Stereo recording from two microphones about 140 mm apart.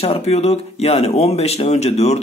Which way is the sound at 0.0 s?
45° left (ahead or behind).